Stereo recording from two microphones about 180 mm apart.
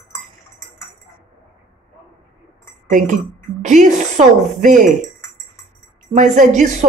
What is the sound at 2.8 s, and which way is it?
Chink, 45° right (ahead or behind).